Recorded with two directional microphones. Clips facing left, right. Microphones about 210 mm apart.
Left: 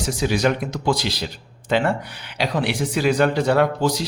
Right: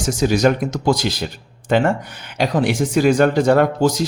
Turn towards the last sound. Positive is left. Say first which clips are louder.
# right 3 dB
turn(degrees=-45)  # may be behind; listen again after turning